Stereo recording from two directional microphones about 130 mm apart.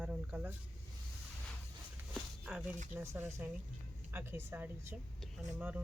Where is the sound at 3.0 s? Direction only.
15° right (ahead or behind).